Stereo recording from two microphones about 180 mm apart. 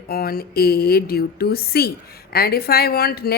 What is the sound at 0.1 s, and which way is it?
Speech, 55° left (ahead or behind).